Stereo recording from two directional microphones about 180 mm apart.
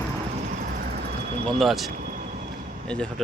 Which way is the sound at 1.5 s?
Centre (ahead or behind).